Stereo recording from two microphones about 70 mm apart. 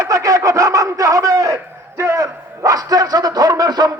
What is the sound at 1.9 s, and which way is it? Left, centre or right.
A man's voice, right.